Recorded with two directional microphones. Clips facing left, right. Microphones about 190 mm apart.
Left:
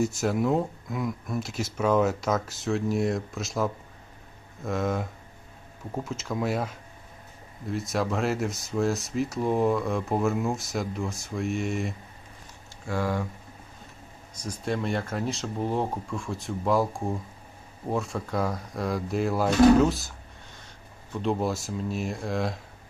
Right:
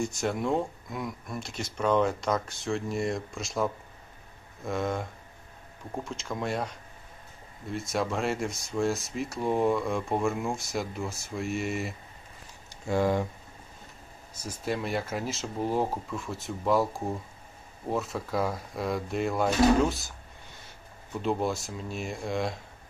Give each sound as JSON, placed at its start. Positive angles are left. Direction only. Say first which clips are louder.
{"t": 0.0, "sound": "speech", "louder": "left 4 dB", "side_deg": 0}
{"t": 12.9, "sound": "speech", "louder": "right 3 dB", "side_deg": -20}
{"t": 14.6, "sound": "speech", "louder": "left 2 dB", "side_deg": -5}
{"t": 21.2, "sound": "speech", "louder": "left 1 dB", "side_deg": 0}